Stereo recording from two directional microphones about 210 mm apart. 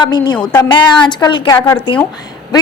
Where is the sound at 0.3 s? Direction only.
5° left (ahead or behind).